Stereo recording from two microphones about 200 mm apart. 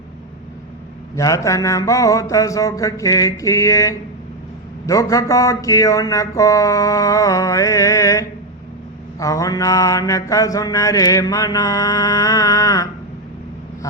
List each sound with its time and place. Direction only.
1.1 s mantra: 15° left (ahead or behind)